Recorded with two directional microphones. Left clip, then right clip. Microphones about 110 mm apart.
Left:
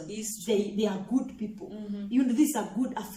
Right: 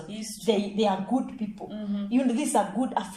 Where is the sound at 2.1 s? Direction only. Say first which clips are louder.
Even; 35° right (ahead or behind).